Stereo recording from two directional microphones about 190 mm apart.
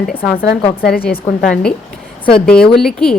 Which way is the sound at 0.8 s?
55° left (ahead or behind).